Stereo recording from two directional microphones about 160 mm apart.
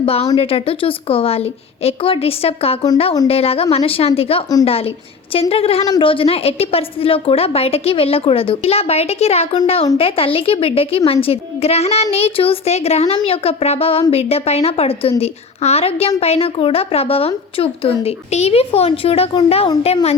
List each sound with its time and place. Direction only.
0.0 s a woman's voice: 35° left (ahead or behind)